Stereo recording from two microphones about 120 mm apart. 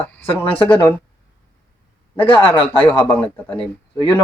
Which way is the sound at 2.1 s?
45° left (ahead or behind).